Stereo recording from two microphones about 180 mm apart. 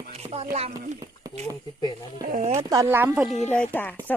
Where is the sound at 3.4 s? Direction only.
10° left (ahead or behind).